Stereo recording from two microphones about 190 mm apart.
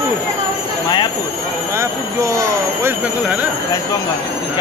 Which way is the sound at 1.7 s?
15° right (ahead or behind).